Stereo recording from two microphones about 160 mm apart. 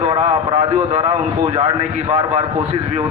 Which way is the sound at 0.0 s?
40° right (ahead or behind).